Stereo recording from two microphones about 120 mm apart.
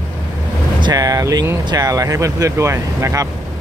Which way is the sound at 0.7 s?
35° right (ahead or behind).